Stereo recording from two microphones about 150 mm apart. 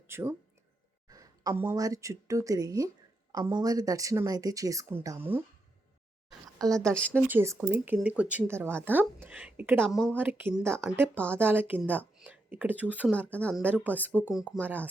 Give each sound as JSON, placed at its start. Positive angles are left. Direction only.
{"t": 0.1, "sound": "speech", "side_deg": -15}
{"t": 1.0, "sound": "a sound", "side_deg": -25}
{"t": 1.6, "sound": "speech", "side_deg": -25}
{"t": 7.1, "sound": "a woman's voice", "side_deg": -15}
{"t": 9.9, "sound": "speech", "side_deg": 5}
{"t": 10.2, "sound": "a woman's voice", "side_deg": -15}